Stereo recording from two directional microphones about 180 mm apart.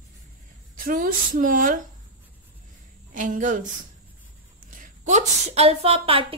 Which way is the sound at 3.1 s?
45° right (ahead or behind).